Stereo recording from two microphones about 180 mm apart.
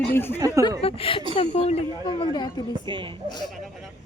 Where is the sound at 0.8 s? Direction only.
30° left (ahead or behind).